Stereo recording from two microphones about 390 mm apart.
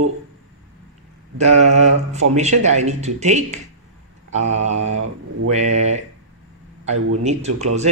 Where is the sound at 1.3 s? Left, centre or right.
Centre.